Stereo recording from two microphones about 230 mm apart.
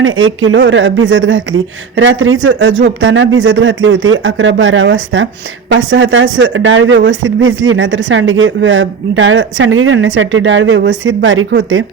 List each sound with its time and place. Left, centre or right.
0.0 s speech: right